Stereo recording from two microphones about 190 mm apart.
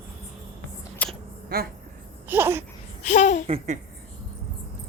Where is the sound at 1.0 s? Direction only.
5° left (ahead or behind).